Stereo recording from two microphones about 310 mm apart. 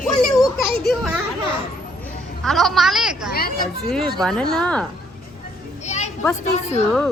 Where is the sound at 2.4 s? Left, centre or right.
Centre.